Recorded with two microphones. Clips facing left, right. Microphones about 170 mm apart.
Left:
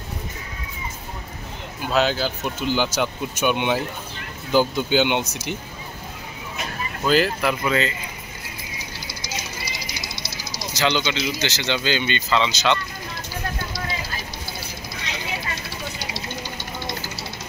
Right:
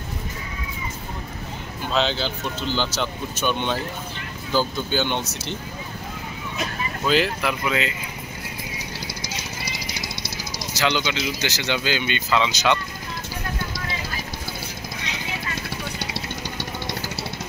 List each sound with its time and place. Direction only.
1.8 s speech: 5° left (ahead or behind)
7.1 s speech: centre (ahead or behind)
10.7 s speech: 5° right (ahead or behind)
16.0 s vehicle: 65° right (ahead or behind)